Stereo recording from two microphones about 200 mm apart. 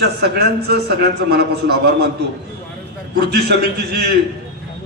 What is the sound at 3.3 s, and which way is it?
Speech, 55° right (ahead or behind).